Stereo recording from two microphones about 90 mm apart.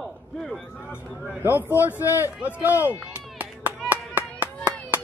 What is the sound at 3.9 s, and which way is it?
Clapping, 20° right (ahead or behind).